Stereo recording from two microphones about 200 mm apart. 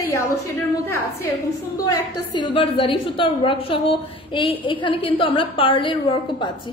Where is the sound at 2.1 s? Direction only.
25° left (ahead or behind).